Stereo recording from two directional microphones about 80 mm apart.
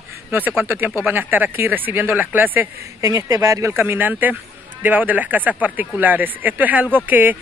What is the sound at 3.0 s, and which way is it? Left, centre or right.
Speech, right.